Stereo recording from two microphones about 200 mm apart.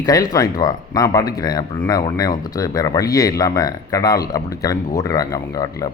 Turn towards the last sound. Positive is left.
turn(degrees=15)  # may be behind; listen again after turning